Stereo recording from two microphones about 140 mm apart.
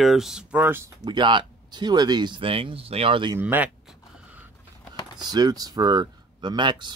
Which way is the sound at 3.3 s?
10° right (ahead or behind).